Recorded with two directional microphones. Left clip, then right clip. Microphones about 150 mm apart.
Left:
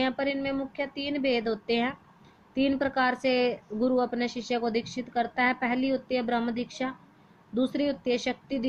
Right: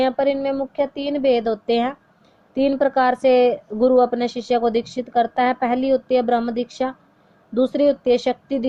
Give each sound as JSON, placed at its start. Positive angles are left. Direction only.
{"t": 0.0, "sound": "speech", "side_deg": -55}